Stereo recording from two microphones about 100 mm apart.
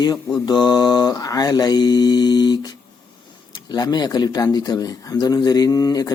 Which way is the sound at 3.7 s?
45° left (ahead or behind).